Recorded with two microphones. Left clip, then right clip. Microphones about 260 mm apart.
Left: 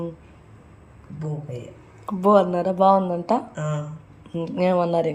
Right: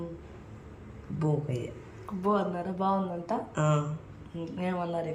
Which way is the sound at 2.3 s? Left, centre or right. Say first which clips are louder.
Left 13 dB; left.